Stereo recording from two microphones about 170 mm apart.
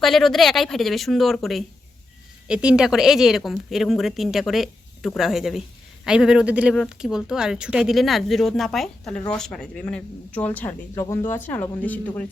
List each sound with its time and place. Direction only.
0.0 s a woman's voice: centre (ahead or behind)
11.0 s speech: 25° left (ahead or behind)
11.3 s speech: 10° left (ahead or behind)